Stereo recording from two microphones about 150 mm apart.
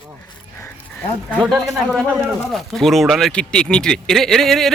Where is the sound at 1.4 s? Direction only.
Centre (ahead or behind).